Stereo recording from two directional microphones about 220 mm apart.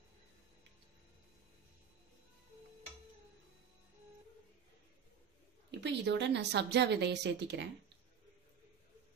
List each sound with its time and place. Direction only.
5.8 s a woman's voice: 50° right (ahead or behind)